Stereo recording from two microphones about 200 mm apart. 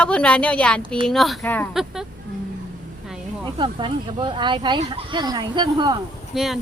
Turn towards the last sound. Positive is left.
turn(degrees=0)  # may be behind; listen again after turning